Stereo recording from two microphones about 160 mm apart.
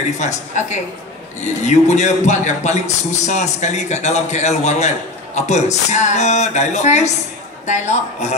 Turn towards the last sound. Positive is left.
turn(degrees=50)  # may be behind; listen again after turning